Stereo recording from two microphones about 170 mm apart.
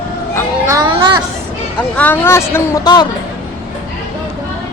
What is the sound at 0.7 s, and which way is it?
Children playing, 25° right (ahead or behind).